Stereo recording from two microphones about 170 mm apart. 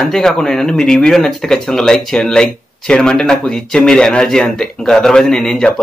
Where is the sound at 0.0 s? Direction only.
Centre (ahead or behind).